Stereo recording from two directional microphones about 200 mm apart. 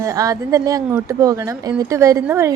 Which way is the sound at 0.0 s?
15° right (ahead or behind).